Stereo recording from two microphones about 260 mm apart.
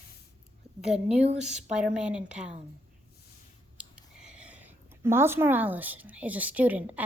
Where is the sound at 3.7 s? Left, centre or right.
Centre.